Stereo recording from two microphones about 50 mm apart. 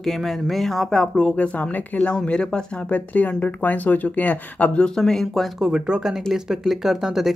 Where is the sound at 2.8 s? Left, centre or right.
Left.